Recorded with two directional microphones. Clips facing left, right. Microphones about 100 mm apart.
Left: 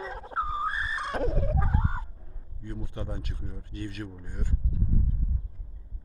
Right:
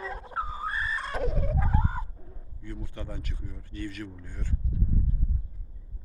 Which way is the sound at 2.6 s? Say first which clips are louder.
Left 2 dB; 20° left (ahead or behind).